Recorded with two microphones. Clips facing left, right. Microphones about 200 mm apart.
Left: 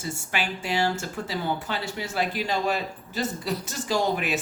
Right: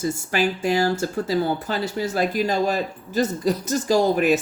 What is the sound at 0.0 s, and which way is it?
Speech, 40° right (ahead or behind).